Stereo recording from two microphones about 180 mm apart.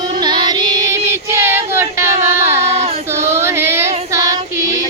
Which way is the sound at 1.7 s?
15° right (ahead or behind).